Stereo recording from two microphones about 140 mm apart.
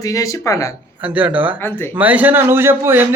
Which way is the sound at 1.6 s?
15° left (ahead or behind).